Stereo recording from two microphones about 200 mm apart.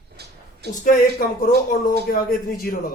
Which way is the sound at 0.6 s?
55° right (ahead or behind).